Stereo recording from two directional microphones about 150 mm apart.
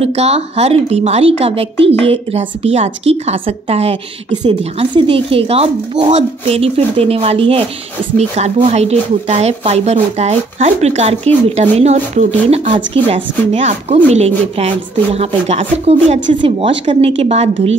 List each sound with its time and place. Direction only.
0.0 s speech: 45° right (ahead or behind)